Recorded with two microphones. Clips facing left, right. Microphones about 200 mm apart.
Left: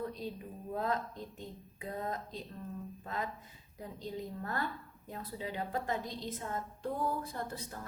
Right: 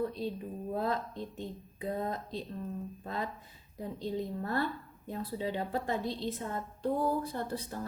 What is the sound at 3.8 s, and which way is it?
A woman's voice, 30° right (ahead or behind).